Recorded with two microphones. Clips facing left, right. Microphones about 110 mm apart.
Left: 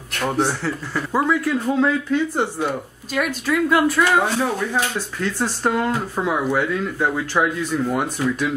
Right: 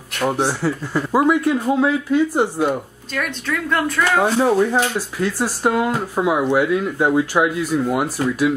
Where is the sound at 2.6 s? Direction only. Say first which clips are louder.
Right 4 dB; 5° left (ahead or behind).